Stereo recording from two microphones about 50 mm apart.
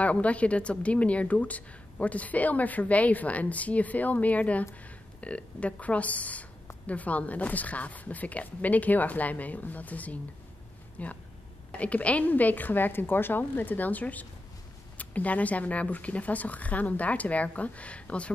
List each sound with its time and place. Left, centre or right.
0.0 s a woman's voice: left